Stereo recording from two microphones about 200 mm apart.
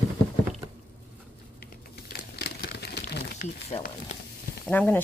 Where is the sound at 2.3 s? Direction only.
55° left (ahead or behind).